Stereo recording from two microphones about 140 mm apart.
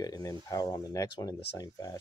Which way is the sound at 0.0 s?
25° left (ahead or behind).